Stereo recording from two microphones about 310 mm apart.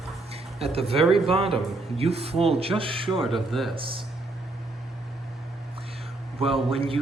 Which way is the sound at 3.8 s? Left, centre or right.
Centre.